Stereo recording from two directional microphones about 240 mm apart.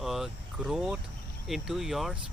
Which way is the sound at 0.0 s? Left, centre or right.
Centre.